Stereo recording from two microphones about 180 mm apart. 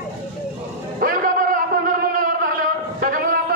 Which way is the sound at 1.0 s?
50° right (ahead or behind).